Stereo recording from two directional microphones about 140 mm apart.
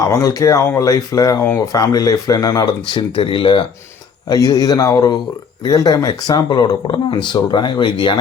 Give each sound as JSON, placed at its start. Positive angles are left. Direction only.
{"t": 0.1, "sound": "speech", "side_deg": 25}
{"t": 1.5, "sound": "speech", "side_deg": 15}
{"t": 1.7, "sound": "speech", "side_deg": 25}
{"t": 4.3, "sound": "speech", "side_deg": 25}